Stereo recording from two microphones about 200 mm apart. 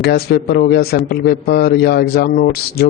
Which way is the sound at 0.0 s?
50° left (ahead or behind).